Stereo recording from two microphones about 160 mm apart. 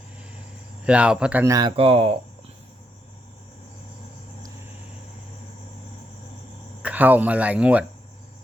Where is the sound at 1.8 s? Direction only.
40° right (ahead or behind).